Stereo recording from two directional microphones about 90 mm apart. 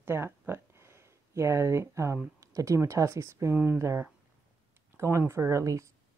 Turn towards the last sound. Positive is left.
turn(degrees=-35)  # may be behind; listen again after turning